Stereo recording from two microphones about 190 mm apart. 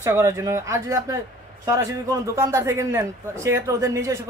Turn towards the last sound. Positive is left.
turn(degrees=-15)  # may be behind; listen again after turning